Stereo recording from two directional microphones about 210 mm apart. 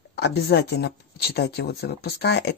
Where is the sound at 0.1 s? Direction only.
55° left (ahead or behind).